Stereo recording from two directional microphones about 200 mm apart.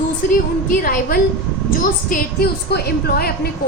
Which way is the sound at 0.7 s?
45° left (ahead or behind).